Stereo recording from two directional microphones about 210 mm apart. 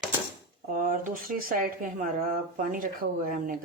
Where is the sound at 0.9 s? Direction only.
40° right (ahead or behind).